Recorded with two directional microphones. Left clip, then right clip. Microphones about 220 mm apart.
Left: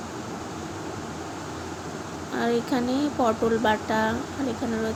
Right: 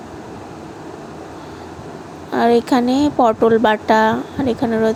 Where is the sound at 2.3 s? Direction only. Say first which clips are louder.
Right 11 dB; 35° right (ahead or behind).